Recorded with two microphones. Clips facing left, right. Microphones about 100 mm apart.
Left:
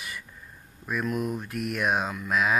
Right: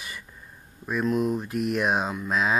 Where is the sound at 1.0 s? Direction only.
25° right (ahead or behind).